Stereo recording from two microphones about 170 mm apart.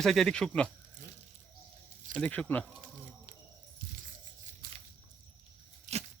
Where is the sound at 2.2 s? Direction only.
10° left (ahead or behind).